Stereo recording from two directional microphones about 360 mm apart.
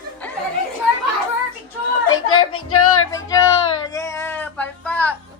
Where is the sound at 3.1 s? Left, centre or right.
Centre.